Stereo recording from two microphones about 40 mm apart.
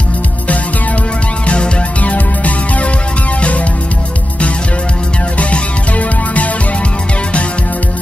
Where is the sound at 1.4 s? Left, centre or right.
Left.